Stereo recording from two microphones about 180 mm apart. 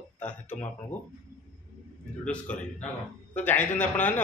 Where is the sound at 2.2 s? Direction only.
5° left (ahead or behind).